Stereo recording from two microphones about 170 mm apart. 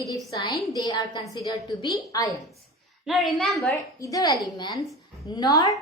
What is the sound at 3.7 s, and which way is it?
A woman's voice, 20° left (ahead or behind).